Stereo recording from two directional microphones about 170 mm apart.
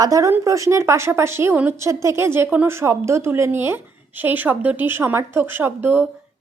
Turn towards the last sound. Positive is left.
turn(degrees=-10)  # may be behind; listen again after turning